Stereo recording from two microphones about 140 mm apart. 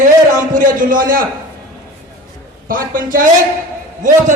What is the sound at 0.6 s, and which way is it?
Speech, 80° right.